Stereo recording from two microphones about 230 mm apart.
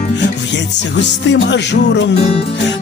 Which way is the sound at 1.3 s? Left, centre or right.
Left.